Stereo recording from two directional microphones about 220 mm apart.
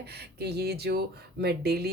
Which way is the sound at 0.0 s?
45° right (ahead or behind).